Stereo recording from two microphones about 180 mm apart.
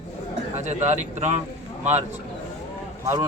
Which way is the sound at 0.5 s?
40° right (ahead or behind).